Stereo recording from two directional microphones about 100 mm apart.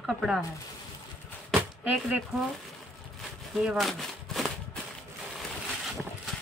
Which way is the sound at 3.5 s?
Centre (ahead or behind).